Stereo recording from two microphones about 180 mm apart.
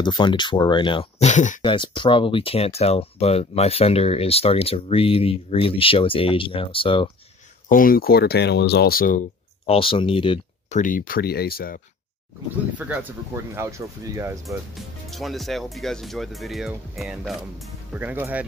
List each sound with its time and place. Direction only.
0.0 s speech: 25° left (ahead or behind)
1.2 s speech: 45° left (ahead or behind)
1.6 s speech: 25° left (ahead or behind)
7.6 s speech: 50° left (ahead or behind)
9.7 s speech: 30° left (ahead or behind)
10.8 s speech: 50° left (ahead or behind)
12.7 s speech: 10° right (ahead or behind)
15.0 s speech: centre (ahead or behind)
17.9 s speech: 10° right (ahead or behind)